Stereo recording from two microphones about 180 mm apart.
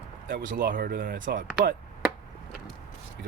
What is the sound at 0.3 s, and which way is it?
Speech, 60° right (ahead or behind).